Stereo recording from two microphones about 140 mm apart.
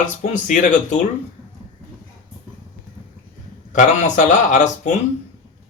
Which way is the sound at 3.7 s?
60° left (ahead or behind).